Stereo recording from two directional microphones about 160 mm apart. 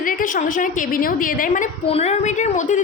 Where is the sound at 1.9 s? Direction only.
40° left (ahead or behind).